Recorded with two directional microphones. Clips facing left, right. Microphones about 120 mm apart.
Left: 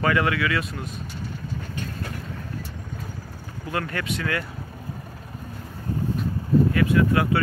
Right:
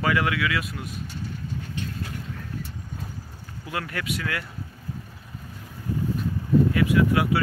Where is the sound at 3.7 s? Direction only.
10° right (ahead or behind).